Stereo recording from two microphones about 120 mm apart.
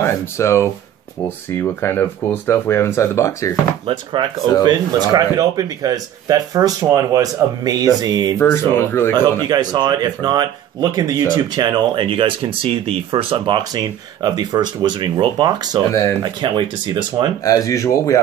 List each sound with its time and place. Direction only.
0.0 s speech: 20° left (ahead or behind)
3.8 s speech: 45° right (ahead or behind)
8.4 s speech: 20° left (ahead or behind)
9.1 s speech: 35° right (ahead or behind)
17.5 s speech: 25° left (ahead or behind)